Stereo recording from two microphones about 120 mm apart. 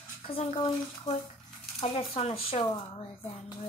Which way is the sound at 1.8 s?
60° left (ahead or behind).